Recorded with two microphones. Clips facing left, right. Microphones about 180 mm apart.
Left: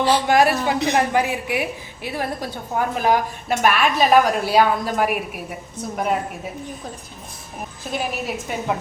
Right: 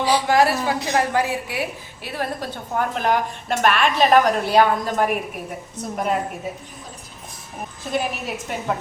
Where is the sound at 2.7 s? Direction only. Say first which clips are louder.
Left 2 dB; 10° left (ahead or behind).